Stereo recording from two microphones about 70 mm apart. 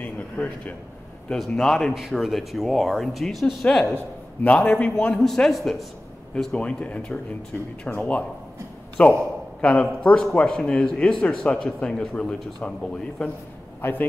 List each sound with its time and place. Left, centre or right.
0.0 s a sound: left
1.3 s a man's voice: centre
3.9 s a man's voice: left
5.1 s speech: centre
6.3 s a man's voice: centre
13.7 s a man's voice: left